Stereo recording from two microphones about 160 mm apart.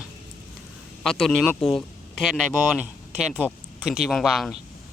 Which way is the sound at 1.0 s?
5° left (ahead or behind).